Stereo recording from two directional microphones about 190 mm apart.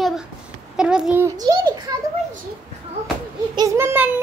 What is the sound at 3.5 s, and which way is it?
Speech, 15° right (ahead or behind).